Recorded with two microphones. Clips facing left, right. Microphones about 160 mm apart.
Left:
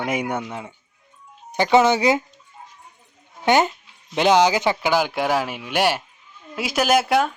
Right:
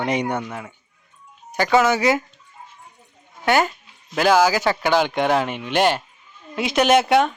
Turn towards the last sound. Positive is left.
turn(degrees=0)  # may be behind; listen again after turning